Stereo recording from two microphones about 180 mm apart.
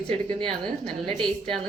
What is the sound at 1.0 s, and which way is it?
Speech, 30° right (ahead or behind).